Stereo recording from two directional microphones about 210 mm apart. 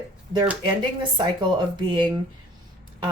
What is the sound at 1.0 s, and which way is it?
A woman's voice, 20° right (ahead or behind).